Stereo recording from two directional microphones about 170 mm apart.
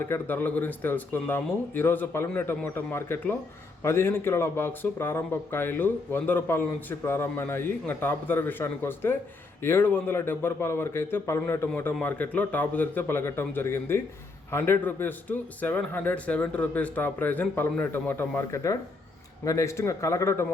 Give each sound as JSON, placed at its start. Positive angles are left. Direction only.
{"t": 0.0, "sound": "speech", "side_deg": 10}